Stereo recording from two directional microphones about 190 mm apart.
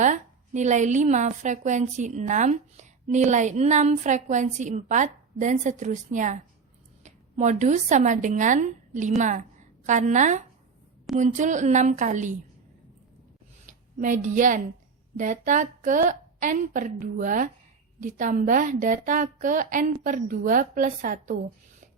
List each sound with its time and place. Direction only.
0.0 s a woman's voice: 40° right (ahead or behind)
13.7 s a woman's voice: 40° right (ahead or behind)